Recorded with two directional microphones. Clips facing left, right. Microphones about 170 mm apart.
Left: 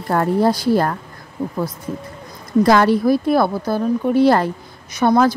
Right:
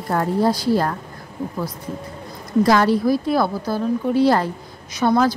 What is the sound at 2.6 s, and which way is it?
A woman's voice, 60° left (ahead or behind).